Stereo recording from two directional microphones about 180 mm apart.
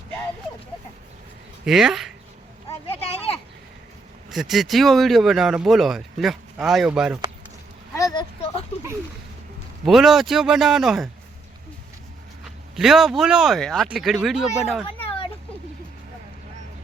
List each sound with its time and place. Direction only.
1.6 s speech: centre (ahead or behind)
2.6 s a sound: 30° left (ahead or behind)
4.3 s speech: centre (ahead or behind)
7.9 s a sound: 20° left (ahead or behind)
9.8 s speech: centre (ahead or behind)
12.5 s speech: centre (ahead or behind)